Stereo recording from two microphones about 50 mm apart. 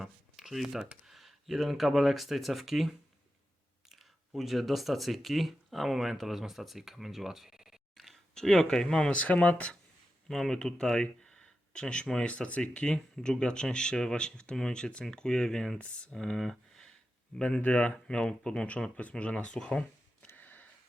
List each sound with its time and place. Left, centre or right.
0.0 s shuffling cards: centre
1.0 s speech: centre
4.4 s speech: centre
8.4 s speech: centre
9.1 s speech: left
10.2 s speech: centre
15.8 s speech: left
16.1 s speech: centre
17.4 s speech: left
18.1 s speech: centre
20.2 s a sound: left